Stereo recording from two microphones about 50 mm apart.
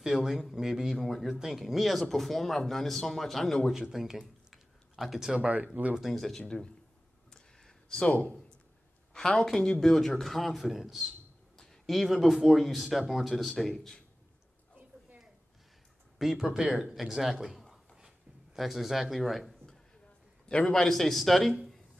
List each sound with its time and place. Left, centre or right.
0.2 s speech: centre
3.7 s speech: centre
4.5 s a sound: centre
5.4 s speech: right
5.9 s speech: centre
7.2 s a sound: centre
9.1 s speech: centre
16.2 s speech: centre
17.9 s a sound: centre
18.6 s speech: centre
20.4 s a man's voice: left
20.7 s speech: centre